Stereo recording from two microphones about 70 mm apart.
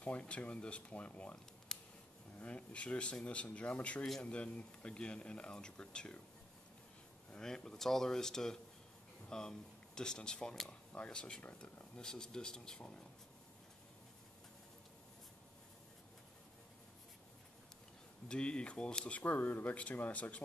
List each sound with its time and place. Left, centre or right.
0.0 s speech: centre
1.7 s a sound: centre
2.4 s speech: centre
7.3 s speech: centre
18.3 s speech: centre